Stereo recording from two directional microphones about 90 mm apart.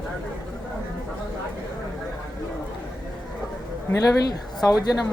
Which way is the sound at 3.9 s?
45° left (ahead or behind).